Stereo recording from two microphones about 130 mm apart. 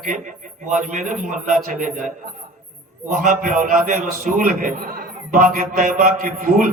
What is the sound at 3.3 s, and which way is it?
A man's voice, 85° right.